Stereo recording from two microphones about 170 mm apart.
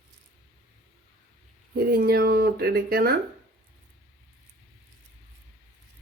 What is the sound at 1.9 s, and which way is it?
A woman's voice, 65° right (ahead or behind).